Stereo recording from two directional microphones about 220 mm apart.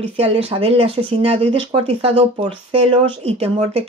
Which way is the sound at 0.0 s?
25° right (ahead or behind).